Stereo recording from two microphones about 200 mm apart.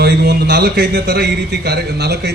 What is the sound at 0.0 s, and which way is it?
A man's voice, 55° right (ahead or behind).